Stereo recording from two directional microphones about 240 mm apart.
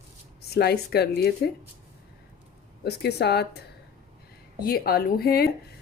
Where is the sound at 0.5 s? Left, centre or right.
Left.